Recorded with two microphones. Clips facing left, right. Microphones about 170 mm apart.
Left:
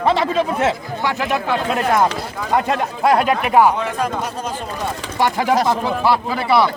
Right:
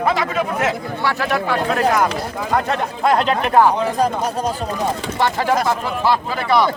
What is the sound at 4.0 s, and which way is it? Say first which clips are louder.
Speech: right 4 dB; 40° right (ahead or behind).